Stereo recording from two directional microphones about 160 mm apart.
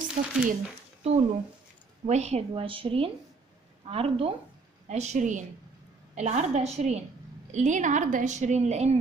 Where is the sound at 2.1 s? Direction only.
45° right (ahead or behind).